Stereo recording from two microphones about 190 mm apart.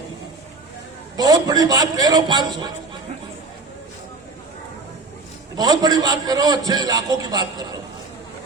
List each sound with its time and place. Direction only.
1.1 s a man's voice: 20° right (ahead or behind)
5.5 s a man's voice: 20° right (ahead or behind)